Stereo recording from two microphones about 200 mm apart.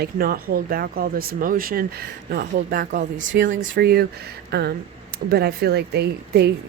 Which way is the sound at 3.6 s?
50° right (ahead or behind).